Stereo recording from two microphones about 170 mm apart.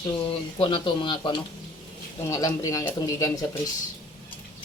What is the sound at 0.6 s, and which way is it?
Speech, 30° left (ahead or behind).